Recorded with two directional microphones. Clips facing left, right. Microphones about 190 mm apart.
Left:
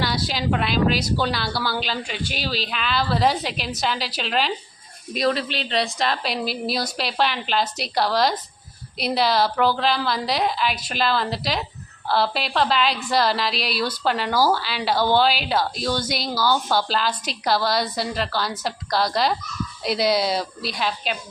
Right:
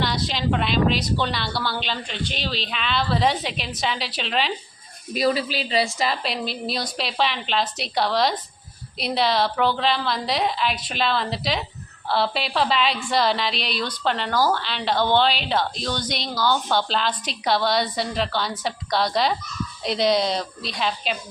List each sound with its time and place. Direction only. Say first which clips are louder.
0.0 s a woman's voice: even; 5° left (ahead or behind)